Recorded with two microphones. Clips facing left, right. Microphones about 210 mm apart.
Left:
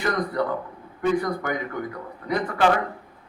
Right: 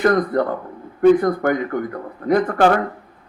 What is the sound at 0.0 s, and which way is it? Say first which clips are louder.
Speech: right 8 dB; 50° right (ahead or behind).